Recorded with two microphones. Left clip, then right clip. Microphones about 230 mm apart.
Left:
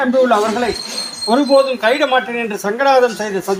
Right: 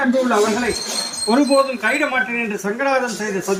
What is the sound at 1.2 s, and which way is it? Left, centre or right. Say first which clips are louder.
Speech: left 4 dB; left.